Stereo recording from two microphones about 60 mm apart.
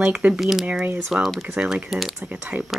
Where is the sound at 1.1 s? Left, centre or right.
Centre.